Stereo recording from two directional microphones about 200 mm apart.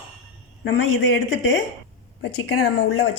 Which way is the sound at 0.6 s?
70° left (ahead or behind).